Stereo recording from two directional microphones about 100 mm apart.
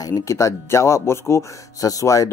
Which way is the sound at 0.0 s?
35° left (ahead or behind).